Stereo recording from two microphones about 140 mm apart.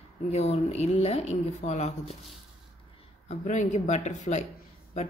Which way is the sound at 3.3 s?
60° left (ahead or behind).